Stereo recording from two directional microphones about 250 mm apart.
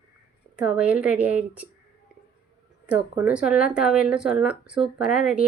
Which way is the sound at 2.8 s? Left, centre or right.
Centre.